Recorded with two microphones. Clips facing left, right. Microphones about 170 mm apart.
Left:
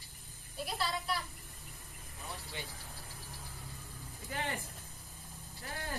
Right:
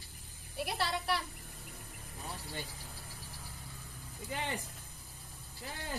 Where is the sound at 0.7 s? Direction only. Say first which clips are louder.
Right 2 dB; 70° right (ahead or behind).